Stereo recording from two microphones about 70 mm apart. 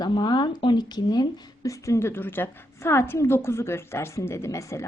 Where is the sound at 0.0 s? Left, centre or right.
Left.